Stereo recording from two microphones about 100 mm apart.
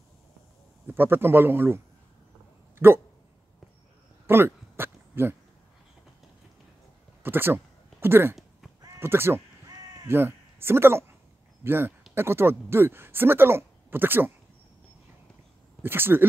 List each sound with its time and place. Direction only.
0.8 s speech: 20° right (ahead or behind)
4.3 s a sound: 25° right (ahead or behind)
7.2 s speech: 20° right (ahead or behind)
15.8 s speech: 20° right (ahead or behind)